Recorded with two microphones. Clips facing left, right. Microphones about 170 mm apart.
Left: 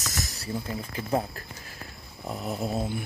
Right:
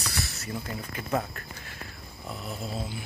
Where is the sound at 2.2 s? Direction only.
40° left (ahead or behind).